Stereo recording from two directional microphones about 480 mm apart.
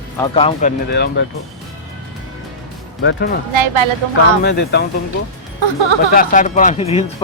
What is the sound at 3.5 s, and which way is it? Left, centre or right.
Speech, right.